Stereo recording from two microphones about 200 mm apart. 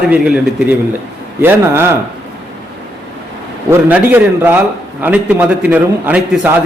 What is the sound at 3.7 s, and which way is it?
A man's voice, 10° right (ahead or behind).